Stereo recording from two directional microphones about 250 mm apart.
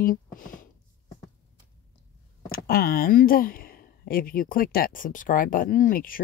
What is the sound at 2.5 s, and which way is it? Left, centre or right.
Speech, left.